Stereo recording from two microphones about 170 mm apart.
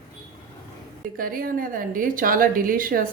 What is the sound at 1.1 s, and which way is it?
Speech, 55° right (ahead or behind).